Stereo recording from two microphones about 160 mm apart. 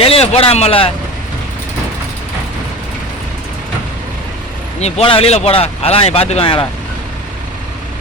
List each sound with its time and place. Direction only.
0.0 s speech: 40° left (ahead or behind)
4.8 s speech: 35° left (ahead or behind)